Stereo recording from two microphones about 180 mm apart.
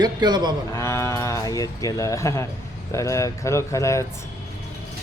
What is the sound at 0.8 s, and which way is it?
A man's voice, 15° left (ahead or behind).